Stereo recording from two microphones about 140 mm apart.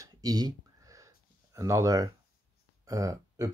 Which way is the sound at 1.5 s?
25° right (ahead or behind).